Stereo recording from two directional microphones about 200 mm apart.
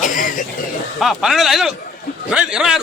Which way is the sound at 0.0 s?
40° left (ahead or behind).